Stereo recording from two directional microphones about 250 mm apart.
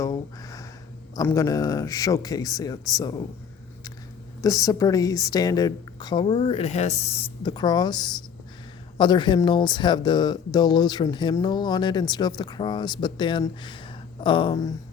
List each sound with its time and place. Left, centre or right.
0.0 s a sound: centre
1.1 s speech: centre
4.4 s speech: centre